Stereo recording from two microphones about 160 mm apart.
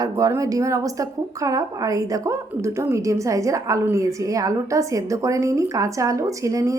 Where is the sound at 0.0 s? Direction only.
20° right (ahead or behind).